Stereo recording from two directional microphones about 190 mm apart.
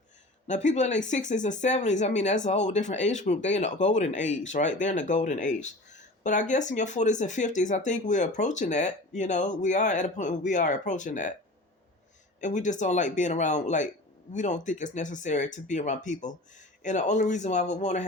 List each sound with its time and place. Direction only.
0.4 s speech: 40° left (ahead or behind)
12.4 s speech: 40° left (ahead or behind)